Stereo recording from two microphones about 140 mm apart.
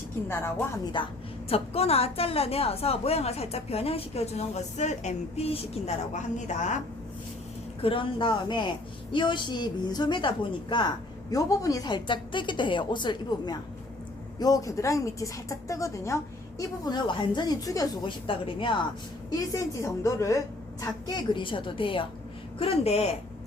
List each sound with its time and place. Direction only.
0.9 s a woman's voice: 35° left (ahead or behind); by 6.7 s 60° left (ahead or behind)
7.8 s a woman's voice: 40° left (ahead or behind)
19.3 s a woman's voice: 25° left (ahead or behind); by 23.0 s 45° left (ahead or behind)